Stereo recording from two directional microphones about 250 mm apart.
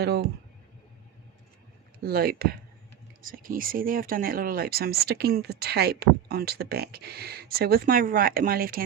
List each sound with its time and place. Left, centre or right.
0.0 s speech: right
2.0 s speech: right